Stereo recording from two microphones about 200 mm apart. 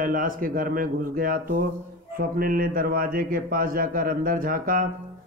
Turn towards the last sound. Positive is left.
turn(degrees=-45)  # may be behind; listen again after turning